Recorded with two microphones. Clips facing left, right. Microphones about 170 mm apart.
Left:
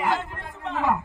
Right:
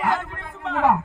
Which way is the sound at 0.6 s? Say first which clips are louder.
Right 5 dB; 65° right (ahead or behind).